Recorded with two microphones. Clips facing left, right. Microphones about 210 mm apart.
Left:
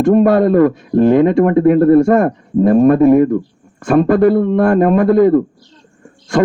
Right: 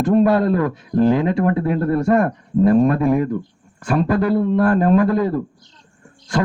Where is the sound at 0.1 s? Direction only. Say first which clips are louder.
Left 5 dB; 50° left (ahead or behind).